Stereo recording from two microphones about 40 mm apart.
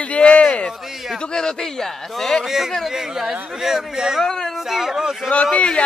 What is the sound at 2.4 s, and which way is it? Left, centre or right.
Speech, centre.